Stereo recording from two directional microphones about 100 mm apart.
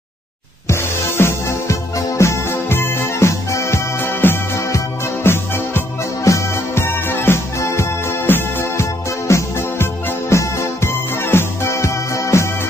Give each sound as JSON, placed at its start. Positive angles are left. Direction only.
{"t": 0.7, "sound": "music", "side_deg": 25}